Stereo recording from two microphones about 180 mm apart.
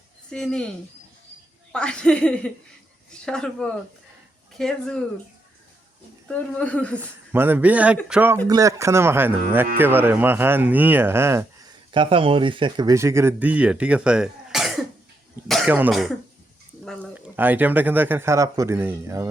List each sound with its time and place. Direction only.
0.3 s speech: 5° left (ahead or behind)
1.7 s speech: 5° left (ahead or behind)
6.2 s speech: 5° left (ahead or behind)
7.3 s speech: 10° right (ahead or behind)
8.4 s speech: 20° right (ahead or behind)
11.9 s speech: 30° right (ahead or behind); by 14.7 s 5° right (ahead or behind)
15.4 s cough: centre (ahead or behind)
15.7 s speech: 5° right (ahead or behind)
17.3 s speech: 10° right (ahead or behind)